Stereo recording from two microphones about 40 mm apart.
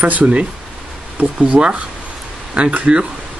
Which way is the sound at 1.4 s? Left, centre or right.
Right.